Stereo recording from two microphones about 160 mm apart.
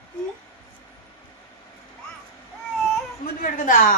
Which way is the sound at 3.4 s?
60° left (ahead or behind).